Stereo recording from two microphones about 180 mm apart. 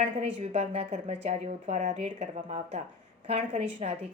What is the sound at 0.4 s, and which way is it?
A woman's voice, 35° right (ahead or behind).